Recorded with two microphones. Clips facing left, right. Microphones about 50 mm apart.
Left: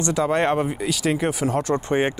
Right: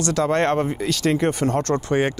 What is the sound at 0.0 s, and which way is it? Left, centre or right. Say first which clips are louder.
Speech: right 1 dB; centre.